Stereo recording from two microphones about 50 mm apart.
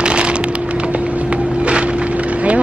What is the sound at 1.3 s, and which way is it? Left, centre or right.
Vehicle, right.